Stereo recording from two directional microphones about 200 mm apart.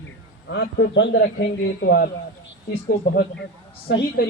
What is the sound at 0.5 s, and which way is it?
A man's voice, 60° left (ahead or behind).